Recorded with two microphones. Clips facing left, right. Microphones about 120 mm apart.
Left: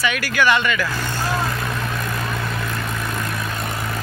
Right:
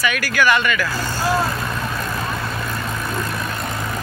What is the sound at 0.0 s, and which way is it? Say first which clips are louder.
Speech: right 1 dB; 25° left (ahead or behind).